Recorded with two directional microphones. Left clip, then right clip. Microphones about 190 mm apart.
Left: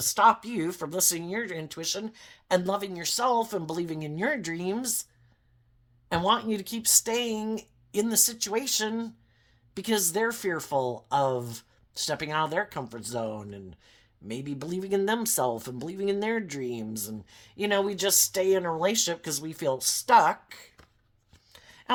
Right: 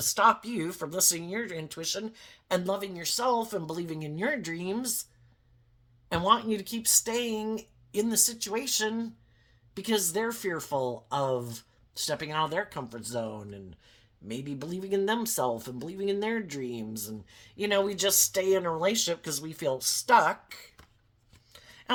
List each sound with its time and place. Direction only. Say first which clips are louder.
0.0 s speech: left 2 dB; 25° left (ahead or behind)
6.1 s speech: even; 30° left (ahead or behind)
21.5 s a sound: left 2 dB; 25° left (ahead or behind)